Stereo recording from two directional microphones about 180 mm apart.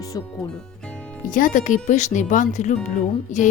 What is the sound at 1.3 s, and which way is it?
A woman's voice, 50° left (ahead or behind).